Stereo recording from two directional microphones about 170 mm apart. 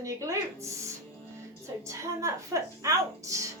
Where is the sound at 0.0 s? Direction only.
20° right (ahead or behind).